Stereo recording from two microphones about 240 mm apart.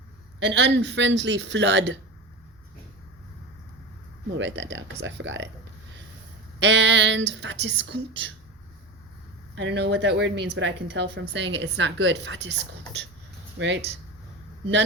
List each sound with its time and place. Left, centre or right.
0.3 s speech: right
4.4 s speech: right
6.6 s speech: right
9.6 s speech: right
13.6 s speech: right